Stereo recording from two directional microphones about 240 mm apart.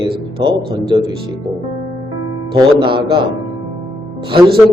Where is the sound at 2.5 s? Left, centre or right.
Right.